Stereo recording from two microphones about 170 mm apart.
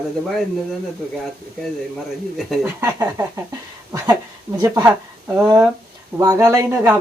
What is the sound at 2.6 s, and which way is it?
Speech, 15° right (ahead or behind).